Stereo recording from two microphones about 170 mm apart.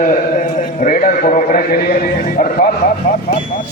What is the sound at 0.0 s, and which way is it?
A man's voice, 50° left (ahead or behind).